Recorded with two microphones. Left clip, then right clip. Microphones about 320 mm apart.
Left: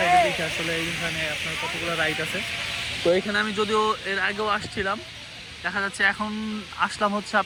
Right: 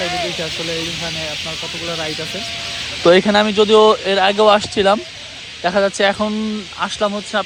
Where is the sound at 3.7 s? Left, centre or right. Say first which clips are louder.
Right 13 dB; right.